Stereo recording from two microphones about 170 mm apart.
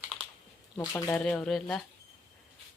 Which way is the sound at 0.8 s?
20° left (ahead or behind).